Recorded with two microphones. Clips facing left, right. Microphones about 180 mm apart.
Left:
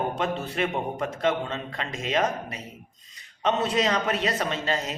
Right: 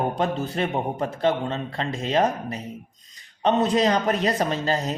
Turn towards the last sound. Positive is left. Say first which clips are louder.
# right 4 dB
turn(degrees=-35)  # may be behind; listen again after turning